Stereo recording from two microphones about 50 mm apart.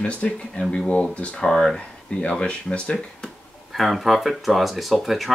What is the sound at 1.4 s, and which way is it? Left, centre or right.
Speech, centre.